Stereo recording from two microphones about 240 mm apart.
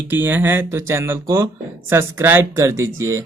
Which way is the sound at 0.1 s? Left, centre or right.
Centre.